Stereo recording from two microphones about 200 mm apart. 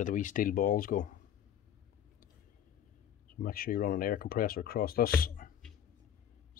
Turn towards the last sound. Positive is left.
turn(degrees=45)  # may be behind; listen again after turning